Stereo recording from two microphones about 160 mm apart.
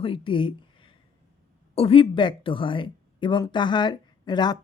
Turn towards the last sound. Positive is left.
turn(degrees=25)  # may be behind; listen again after turning